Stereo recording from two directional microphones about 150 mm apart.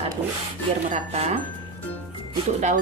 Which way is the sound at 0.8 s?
50° right (ahead or behind).